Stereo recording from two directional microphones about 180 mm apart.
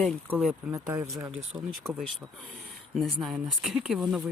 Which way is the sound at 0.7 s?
20° right (ahead or behind).